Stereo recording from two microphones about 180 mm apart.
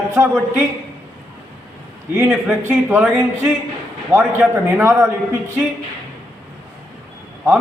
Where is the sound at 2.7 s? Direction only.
5° right (ahead or behind).